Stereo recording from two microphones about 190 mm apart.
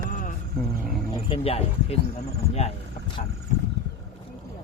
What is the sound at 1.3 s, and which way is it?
Speech, 30° left (ahead or behind).